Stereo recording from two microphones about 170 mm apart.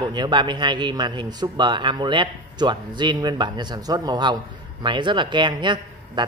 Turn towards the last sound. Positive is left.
turn(degrees=-25)  # may be behind; listen again after turning